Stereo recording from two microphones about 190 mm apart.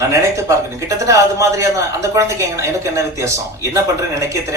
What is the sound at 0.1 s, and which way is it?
A man's voice, 15° right (ahead or behind).